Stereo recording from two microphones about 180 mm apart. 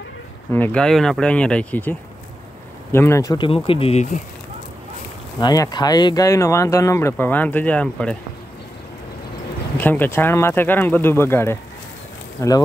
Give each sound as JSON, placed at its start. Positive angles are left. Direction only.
{"t": 0.5, "sound": "speech", "side_deg": 10}
{"t": 3.4, "sound": "speech", "side_deg": 30}
{"t": 5.4, "sound": "speech", "side_deg": 20}
{"t": 9.8, "sound": "speech", "side_deg": 10}